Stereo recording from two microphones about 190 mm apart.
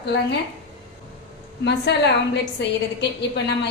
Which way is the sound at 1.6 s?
65° left (ahead or behind).